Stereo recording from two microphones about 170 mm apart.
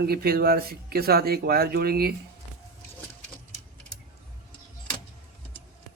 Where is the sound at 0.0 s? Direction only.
65° right (ahead or behind).